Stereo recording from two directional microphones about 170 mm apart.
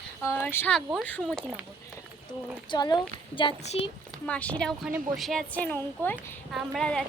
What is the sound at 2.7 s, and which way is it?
A woman's voice, 25° left (ahead or behind).